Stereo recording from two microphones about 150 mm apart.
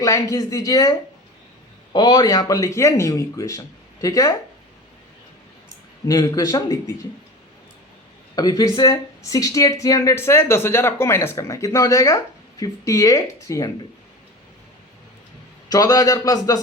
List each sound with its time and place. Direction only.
0.0 s speech: 20° left (ahead or behind)
6.1 s speech: 25° left (ahead or behind)
8.4 s speech: 25° left (ahead or behind)
15.7 s speech: 25° left (ahead or behind)